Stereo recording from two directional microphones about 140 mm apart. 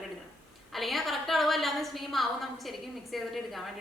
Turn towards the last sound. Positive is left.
turn(degrees=0)  # may be behind; listen again after turning